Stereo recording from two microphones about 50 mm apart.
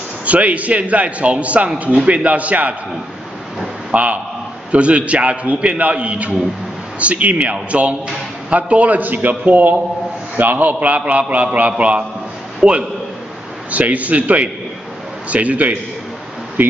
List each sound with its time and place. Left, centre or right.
0.2 s a man's voice: right
3.9 s a man's voice: right